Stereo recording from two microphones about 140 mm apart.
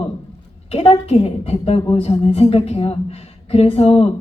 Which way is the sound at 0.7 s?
45° left (ahead or behind).